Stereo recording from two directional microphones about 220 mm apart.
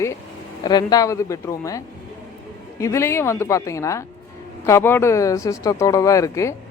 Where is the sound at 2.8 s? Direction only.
10° left (ahead or behind).